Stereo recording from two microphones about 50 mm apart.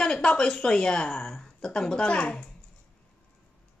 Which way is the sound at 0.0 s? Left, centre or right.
Centre.